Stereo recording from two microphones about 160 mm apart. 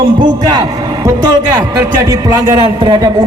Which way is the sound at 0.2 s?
25° right (ahead or behind).